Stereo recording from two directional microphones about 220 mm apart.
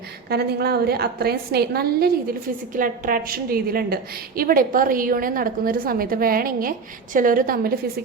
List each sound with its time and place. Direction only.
0.3 s a woman's voice: 45° right (ahead or behind)